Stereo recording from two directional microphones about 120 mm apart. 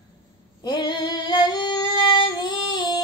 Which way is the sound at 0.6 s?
40° left (ahead or behind).